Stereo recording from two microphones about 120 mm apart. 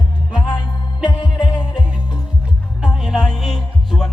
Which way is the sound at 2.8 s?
5° right (ahead or behind).